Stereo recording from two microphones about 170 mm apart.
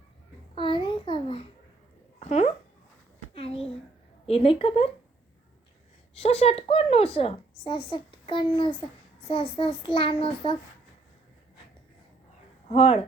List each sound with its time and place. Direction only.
0.5 s a sound: 30° left (ahead or behind)
2.1 s speech: 40° left (ahead or behind)
3.3 s a sound: 35° left (ahead or behind)
4.3 s a woman's voice: 35° left (ahead or behind)
6.1 s a woman's voice: 35° left (ahead or behind)
12.6 s speech: 35° left (ahead or behind)